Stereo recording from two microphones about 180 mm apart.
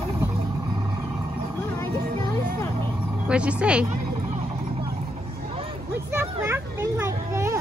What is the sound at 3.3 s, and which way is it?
Speech, 5° right (ahead or behind).